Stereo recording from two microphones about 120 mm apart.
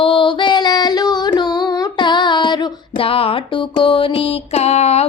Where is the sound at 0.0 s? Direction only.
45° left (ahead or behind).